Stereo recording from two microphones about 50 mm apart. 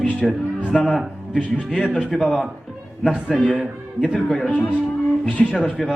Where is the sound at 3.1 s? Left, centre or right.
Centre.